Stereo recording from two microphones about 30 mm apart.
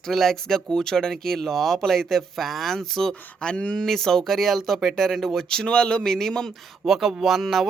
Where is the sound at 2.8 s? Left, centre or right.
Centre.